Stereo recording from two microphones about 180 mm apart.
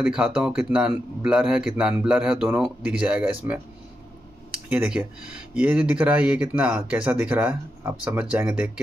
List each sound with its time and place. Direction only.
0.0 s a man's voice: 5° right (ahead or behind)
4.6 s a man's voice: 5° right (ahead or behind)